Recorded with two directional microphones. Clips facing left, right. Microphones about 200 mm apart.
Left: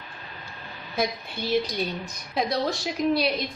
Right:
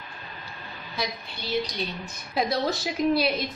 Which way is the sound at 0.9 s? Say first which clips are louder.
Left 5 dB; 55° left (ahead or behind).